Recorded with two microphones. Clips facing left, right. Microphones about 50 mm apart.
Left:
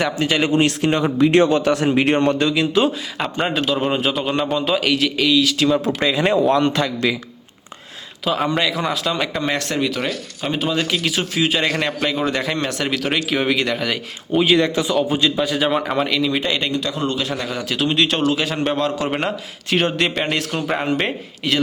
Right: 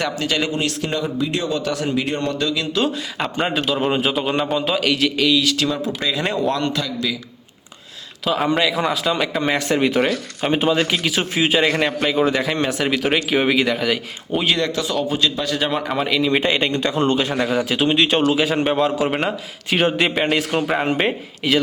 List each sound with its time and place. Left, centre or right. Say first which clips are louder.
0.0 s a man's voice: left 3 dB; centre; by 1.1 s left
1.3 s a man's voice: left 8 dB; left
1.6 s a man's voice: left 5 dB; left
2.8 s a man's voice: left 1 dB; centre
6.0 s a man's voice: left 4 dB; left
6.7 s a man's voice: left 4 dB; left
8.2 s a man's voice: right 1 dB; centre
9.5 s a man's voice: right 3 dB; centre
11.2 s a man's voice: right 1 dB; right
11.5 s a man's voice: right 2 dB; centre
14.5 s speech: left 5 dB; centre
16.3 s a man's voice: right 3 dB; right
16.7 s a man's voice: right 3 dB; right
17.5 s a man's voice: right 1 dB; centre